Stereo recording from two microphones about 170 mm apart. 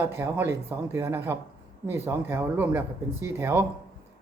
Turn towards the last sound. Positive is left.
turn(degrees=-15)  # may be behind; listen again after turning